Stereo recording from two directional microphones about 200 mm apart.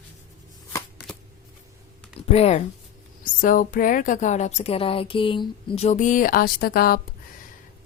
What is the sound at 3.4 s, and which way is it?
A woman's voice, 45° left (ahead or behind).